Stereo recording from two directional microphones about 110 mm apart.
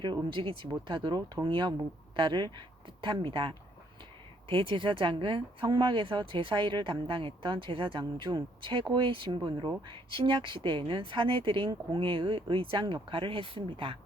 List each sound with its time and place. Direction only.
0.0 s speech: 45° right (ahead or behind)